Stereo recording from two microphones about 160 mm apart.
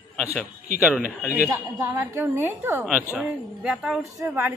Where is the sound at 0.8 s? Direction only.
5° right (ahead or behind).